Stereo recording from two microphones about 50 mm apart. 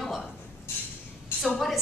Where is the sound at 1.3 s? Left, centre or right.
Left.